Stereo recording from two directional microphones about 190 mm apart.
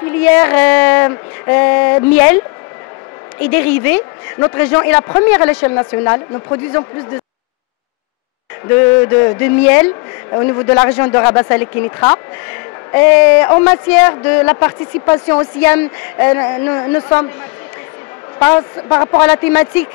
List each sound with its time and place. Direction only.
0.0 s speech: 10° left (ahead or behind)
8.6 s speech: 10° left (ahead or behind)
18.4 s speech: 10° left (ahead or behind)